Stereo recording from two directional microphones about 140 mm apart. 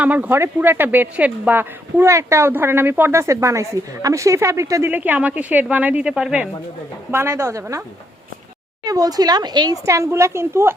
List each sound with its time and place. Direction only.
0.0 s a woman's voice: 10° right (ahead or behind)
8.8 s a woman's voice: 25° right (ahead or behind)